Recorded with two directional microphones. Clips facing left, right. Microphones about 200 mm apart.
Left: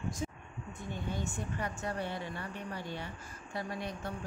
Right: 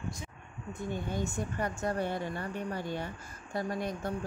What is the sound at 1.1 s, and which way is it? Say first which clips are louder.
Speech: right 4 dB; 45° right (ahead or behind).